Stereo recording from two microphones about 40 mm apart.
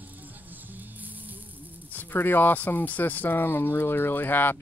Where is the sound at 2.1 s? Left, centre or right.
Left.